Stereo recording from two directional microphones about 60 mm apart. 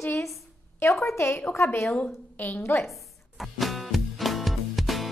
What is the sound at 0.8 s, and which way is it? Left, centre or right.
A woman's voice, left.